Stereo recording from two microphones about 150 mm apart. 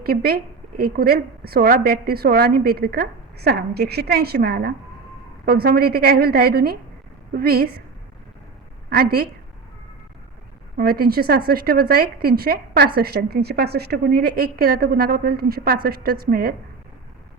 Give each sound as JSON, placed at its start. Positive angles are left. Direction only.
{"t": 0.0, "sound": "a woman's voice", "side_deg": -90}
{"t": 8.9, "sound": "a woman's voice", "side_deg": -90}
{"t": 10.8, "sound": "a woman's voice", "side_deg": -90}